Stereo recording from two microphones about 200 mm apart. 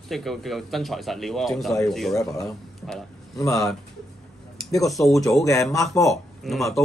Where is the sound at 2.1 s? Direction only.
15° left (ahead or behind).